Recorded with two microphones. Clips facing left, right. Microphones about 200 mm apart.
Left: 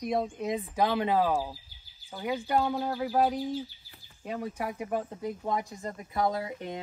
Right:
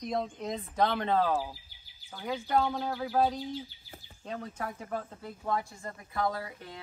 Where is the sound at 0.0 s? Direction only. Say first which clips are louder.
Left 3 dB; 5° left (ahead or behind).